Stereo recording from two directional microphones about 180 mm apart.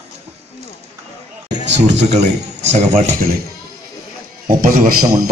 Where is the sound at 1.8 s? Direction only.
40° right (ahead or behind).